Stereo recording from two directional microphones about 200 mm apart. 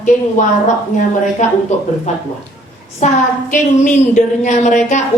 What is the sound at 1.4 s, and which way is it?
Speech, 35° left (ahead or behind).